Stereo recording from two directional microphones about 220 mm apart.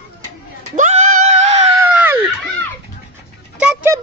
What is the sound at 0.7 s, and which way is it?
Screaming, 35° right (ahead or behind).